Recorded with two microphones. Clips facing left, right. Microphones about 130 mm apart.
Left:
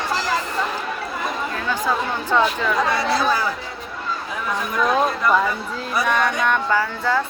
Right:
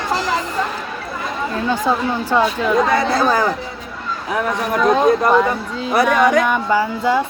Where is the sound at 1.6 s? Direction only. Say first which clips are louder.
Right 8 dB; 30° right (ahead or behind).